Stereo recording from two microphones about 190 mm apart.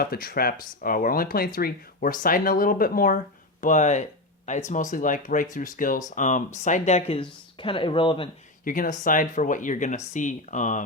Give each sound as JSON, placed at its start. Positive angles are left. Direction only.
{"t": 0.0, "sound": "speech", "side_deg": 50}
{"t": 8.6, "sound": "speech", "side_deg": 45}